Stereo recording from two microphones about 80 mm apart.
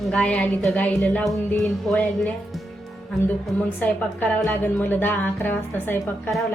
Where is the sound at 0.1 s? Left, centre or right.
Centre.